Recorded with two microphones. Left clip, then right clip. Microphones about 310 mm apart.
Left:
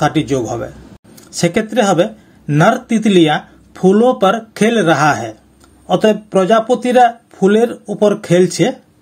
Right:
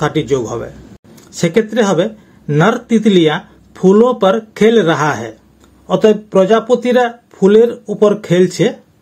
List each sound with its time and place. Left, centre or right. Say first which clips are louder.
0.0 s speech: even; centre